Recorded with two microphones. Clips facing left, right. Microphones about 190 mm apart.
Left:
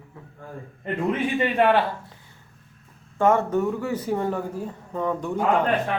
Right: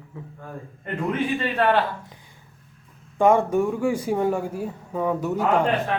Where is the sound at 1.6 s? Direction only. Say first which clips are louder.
Left 2 dB; 15° left (ahead or behind).